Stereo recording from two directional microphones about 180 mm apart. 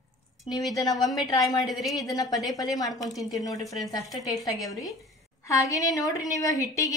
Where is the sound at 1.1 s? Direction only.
25° left (ahead or behind).